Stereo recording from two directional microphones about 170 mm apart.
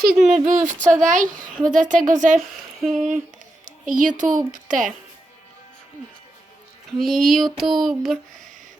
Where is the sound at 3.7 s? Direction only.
50° right (ahead or behind).